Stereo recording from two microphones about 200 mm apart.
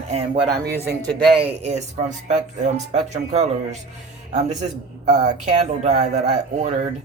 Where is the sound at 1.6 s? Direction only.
35° right (ahead or behind).